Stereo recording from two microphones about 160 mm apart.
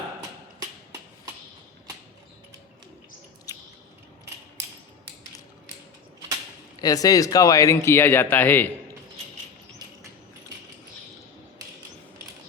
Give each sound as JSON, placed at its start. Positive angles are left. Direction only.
{"t": 6.8, "sound": "speech", "side_deg": 20}